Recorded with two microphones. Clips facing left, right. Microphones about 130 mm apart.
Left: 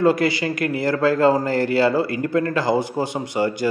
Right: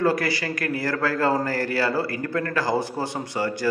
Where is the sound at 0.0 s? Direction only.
20° left (ahead or behind).